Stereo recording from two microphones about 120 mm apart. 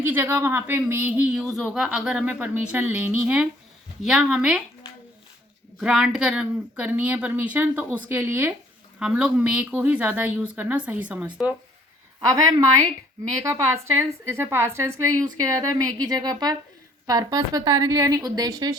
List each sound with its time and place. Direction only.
0.0 s a woman's voice: 20° right (ahead or behind)
1.5 s a woman's voice: 5° left (ahead or behind)
5.8 s a woman's voice: 5° right (ahead or behind)
9.0 s a woman's voice: 5° right (ahead or behind)
12.3 s a woman's voice: 30° right (ahead or behind)